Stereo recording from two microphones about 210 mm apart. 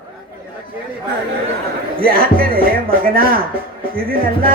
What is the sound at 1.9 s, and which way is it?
A man's voice, 45° right (ahead or behind).